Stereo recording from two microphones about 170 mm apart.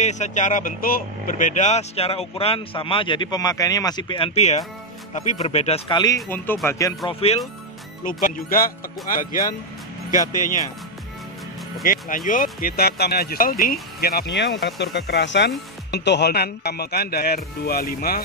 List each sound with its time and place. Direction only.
0.0 s speech: 45° left (ahead or behind)
5.9 s speech: 20° left (ahead or behind)
6.3 s speech: 10° left (ahead or behind)
7.1 s speech: 35° left (ahead or behind)
8.0 s speech: 55° left (ahead or behind)
11.8 s speech: 55° left (ahead or behind)